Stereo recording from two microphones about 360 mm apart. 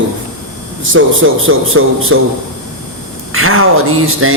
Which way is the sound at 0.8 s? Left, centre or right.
Right.